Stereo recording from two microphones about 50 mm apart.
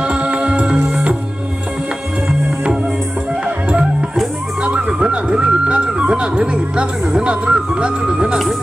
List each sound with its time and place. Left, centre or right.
0.0 s music: right
3.4 s music: centre
4.6 s speech: centre